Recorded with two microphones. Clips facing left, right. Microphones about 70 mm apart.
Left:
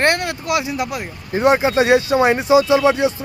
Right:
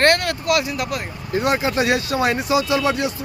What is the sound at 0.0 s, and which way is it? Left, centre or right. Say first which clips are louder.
Speech: right 1 dB; centre.